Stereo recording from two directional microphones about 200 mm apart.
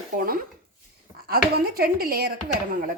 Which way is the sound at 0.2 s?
45° right (ahead or behind).